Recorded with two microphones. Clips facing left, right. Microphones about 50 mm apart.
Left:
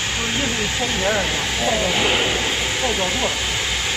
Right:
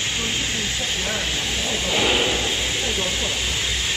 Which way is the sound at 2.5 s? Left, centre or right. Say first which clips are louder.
Left 3 dB; left.